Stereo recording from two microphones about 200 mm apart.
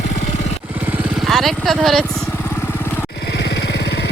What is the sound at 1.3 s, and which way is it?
Speech, centre (ahead or behind).